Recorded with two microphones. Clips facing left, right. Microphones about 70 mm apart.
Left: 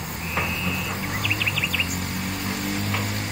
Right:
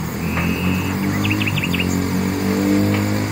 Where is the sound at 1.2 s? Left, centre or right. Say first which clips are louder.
Right 6 dB; centre.